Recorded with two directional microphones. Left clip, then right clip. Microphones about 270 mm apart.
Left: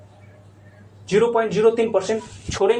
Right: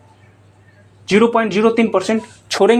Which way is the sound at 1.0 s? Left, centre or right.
Right.